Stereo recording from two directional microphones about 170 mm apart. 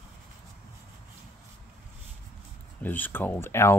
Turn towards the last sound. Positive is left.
turn(degrees=15)  # may be behind; listen again after turning